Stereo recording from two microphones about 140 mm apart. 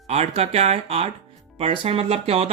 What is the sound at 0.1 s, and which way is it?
Speech, 50° right (ahead or behind).